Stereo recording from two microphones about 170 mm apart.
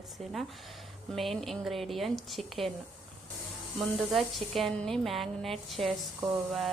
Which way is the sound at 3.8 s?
Centre (ahead or behind).